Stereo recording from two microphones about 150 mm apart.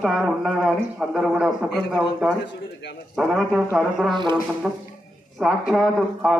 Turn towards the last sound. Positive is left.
turn(degrees=0)  # may be behind; listen again after turning